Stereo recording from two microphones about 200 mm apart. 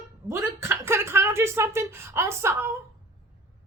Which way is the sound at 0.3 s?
10° right (ahead or behind).